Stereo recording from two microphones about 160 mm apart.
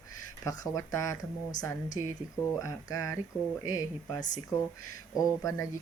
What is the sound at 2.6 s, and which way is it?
Speech, 20° left (ahead or behind).